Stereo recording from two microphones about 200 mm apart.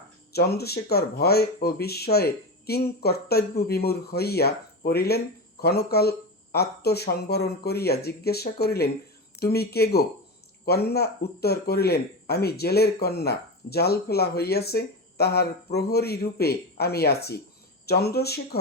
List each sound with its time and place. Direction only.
0.3 s speech: 55° left (ahead or behind)